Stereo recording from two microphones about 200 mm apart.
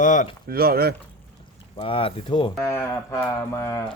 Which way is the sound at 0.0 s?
40° left (ahead or behind).